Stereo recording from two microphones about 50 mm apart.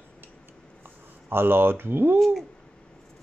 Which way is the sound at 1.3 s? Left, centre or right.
Right.